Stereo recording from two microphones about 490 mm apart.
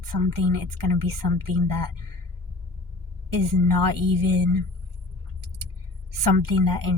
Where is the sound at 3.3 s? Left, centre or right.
Right.